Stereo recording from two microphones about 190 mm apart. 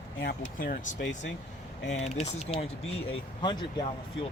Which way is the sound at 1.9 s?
35° left (ahead or behind).